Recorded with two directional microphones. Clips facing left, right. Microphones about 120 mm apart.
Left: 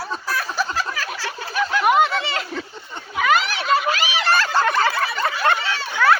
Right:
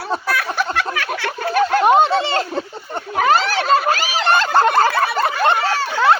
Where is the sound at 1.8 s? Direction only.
30° right (ahead or behind).